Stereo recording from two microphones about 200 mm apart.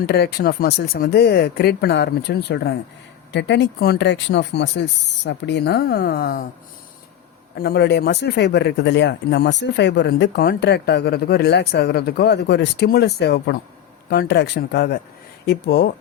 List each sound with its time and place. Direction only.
0.1 s speech: 55° left (ahead or behind)
7.5 s speech: 50° left (ahead or behind)